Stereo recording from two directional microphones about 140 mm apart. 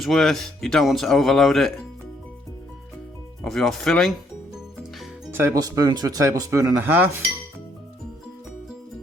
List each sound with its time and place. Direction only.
0.0 s speech: centre (ahead or behind)
3.4 s speech: 5° left (ahead or behind)
4.5 s music: 5° right (ahead or behind)
5.3 s speech: 15° right (ahead or behind)
5.5 s speech: 25° right (ahead or behind)